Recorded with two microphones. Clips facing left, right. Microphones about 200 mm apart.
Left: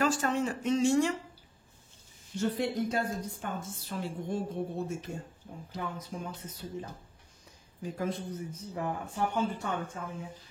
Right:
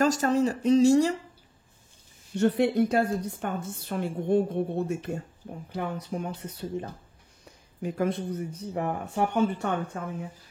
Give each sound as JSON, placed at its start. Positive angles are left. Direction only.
{"t": 0.0, "sound": "speech", "side_deg": -40}
{"t": 2.3, "sound": "a woman's voice", "side_deg": -65}